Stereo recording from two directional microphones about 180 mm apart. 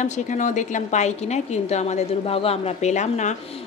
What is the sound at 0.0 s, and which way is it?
Speech, 40° left (ahead or behind).